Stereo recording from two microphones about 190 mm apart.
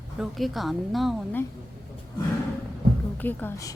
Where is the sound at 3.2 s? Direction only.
10° left (ahead or behind).